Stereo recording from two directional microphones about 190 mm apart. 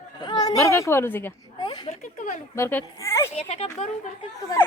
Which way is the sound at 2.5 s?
15° left (ahead or behind).